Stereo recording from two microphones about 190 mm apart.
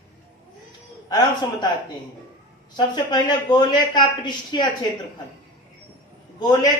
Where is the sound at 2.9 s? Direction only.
20° left (ahead or behind).